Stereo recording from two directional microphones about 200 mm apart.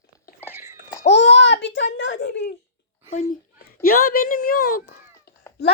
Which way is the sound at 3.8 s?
50° left (ahead or behind).